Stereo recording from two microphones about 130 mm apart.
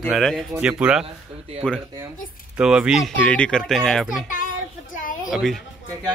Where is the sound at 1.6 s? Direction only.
5° left (ahead or behind).